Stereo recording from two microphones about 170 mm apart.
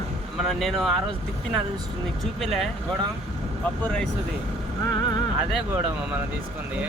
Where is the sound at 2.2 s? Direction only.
Centre (ahead or behind).